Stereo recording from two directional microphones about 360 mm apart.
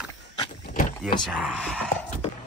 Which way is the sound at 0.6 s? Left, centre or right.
Left.